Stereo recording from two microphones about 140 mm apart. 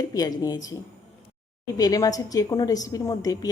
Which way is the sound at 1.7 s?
25° left (ahead or behind).